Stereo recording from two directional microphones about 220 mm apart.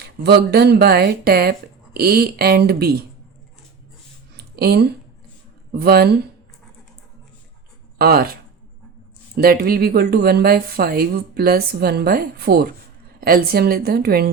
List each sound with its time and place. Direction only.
0.2 s speech: 45° right (ahead or behind)
4.5 s speech: 45° right (ahead or behind)
7.9 s speech: 45° right (ahead or behind)